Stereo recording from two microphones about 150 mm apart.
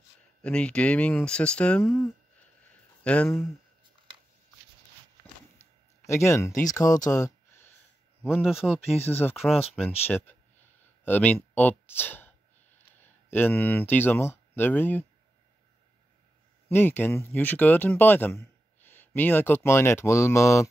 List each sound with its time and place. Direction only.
0.4 s speech: 5° left (ahead or behind)
3.0 s speech: 10° left (ahead or behind)
5.6 s a sound: 20° left (ahead or behind)
8.3 s a man's voice: 5° right (ahead or behind)
9.0 s speech: 15° left (ahead or behind)
11.5 s a sound: 10° left (ahead or behind)
13.0 s speech: 15° left (ahead or behind)
16.6 s speech: 15° left (ahead or behind)